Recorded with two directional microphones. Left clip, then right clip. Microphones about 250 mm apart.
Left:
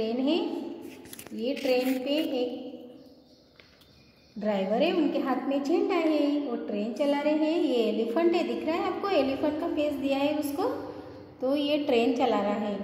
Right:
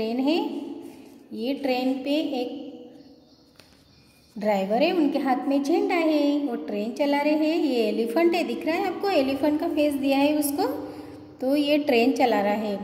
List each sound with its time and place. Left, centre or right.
0.1 s a sound: right
1.4 s a woman's voice: right
4.4 s a woman's voice: right